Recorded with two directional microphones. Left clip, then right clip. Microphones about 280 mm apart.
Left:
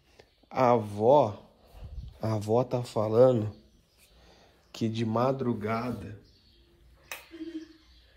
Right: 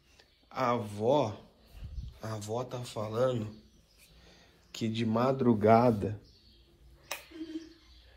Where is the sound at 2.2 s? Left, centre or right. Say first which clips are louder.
Left 9 dB; left.